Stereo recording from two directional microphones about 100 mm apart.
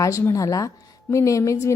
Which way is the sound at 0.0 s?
30° left (ahead or behind).